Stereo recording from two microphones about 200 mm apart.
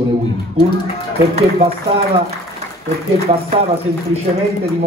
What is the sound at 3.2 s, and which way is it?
Speech, 30° right (ahead or behind).